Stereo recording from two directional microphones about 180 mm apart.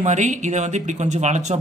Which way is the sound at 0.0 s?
40° right (ahead or behind).